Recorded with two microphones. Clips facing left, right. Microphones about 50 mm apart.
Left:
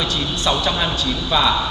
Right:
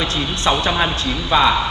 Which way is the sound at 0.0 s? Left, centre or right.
Right.